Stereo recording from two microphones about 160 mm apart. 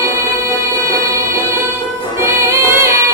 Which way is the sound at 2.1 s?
15° right (ahead or behind).